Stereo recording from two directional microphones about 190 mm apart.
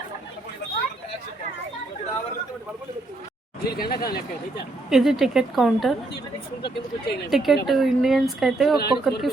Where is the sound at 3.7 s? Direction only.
55° left (ahead or behind).